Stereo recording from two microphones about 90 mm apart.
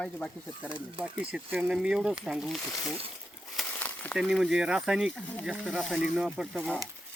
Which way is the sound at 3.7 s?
15° left (ahead or behind).